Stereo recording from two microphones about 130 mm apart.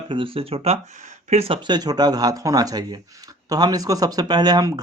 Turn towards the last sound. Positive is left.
turn(degrees=-30)  # may be behind; listen again after turning